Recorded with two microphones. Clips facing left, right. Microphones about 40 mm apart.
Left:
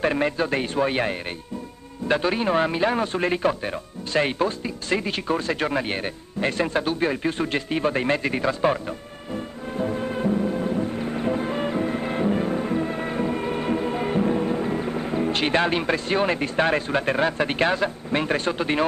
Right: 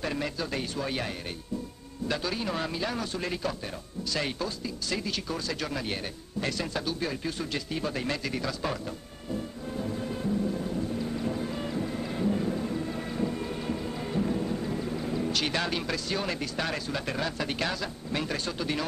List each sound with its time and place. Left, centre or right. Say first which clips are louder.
0.0 s a man's voice: left 9 dB; left
2.0 s radio: left 9 dB; left